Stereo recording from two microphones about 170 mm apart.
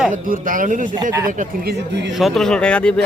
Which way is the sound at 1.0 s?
20° right (ahead or behind).